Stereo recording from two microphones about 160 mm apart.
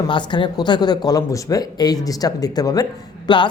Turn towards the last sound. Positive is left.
turn(degrees=30)  # may be behind; listen again after turning